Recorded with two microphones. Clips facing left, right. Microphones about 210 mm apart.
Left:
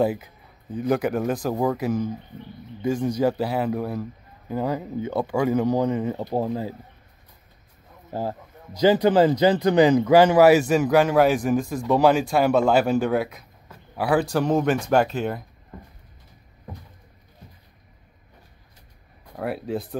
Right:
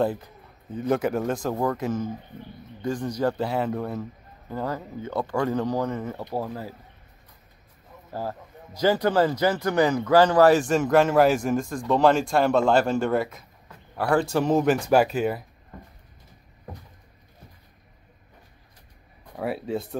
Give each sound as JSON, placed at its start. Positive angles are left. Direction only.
{"t": 0.0, "sound": "speech", "side_deg": 10}
{"t": 8.1, "sound": "speech", "side_deg": 20}
{"t": 19.3, "sound": "speech", "side_deg": 0}